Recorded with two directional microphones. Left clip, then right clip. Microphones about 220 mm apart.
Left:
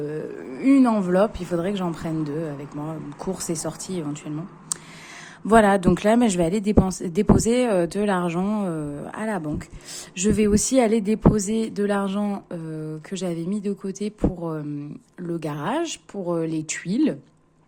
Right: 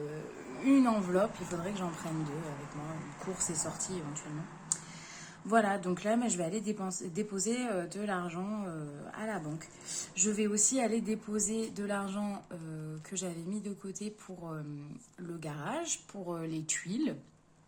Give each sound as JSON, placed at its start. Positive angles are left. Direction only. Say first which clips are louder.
{"t": 0.6, "sound": "speech", "louder": "left 9 dB", "side_deg": 35}
{"t": 3.3, "sound": "a woman's voice", "louder": "left 8 dB", "side_deg": 45}
{"t": 5.5, "sound": "a woman's voice", "louder": "left 13 dB", "side_deg": 50}